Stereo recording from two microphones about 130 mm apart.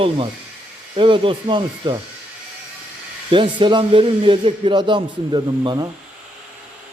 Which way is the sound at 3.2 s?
40° right (ahead or behind).